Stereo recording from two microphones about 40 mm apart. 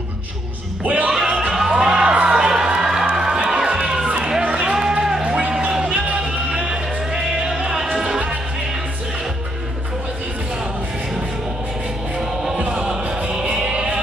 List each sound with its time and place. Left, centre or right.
0.8 s speech: right
1.1 s a sound: centre
2.2 s crowd: centre
4.2 s a sound: right
5.9 s music: right
6.2 s music: centre
12.5 s music: right